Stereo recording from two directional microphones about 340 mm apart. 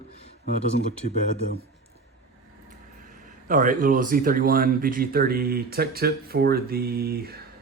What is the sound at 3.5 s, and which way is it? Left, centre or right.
Speech, right.